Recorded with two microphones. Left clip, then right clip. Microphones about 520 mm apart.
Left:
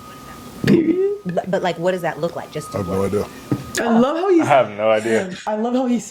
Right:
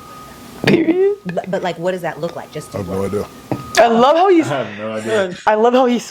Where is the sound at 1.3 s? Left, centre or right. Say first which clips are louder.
Even; centre.